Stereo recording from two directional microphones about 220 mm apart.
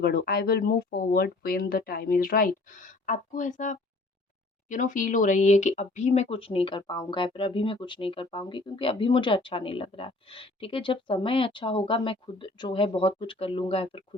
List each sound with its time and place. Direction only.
0.0 s speech: 40° left (ahead or behind); by 14.0 s 25° left (ahead or behind)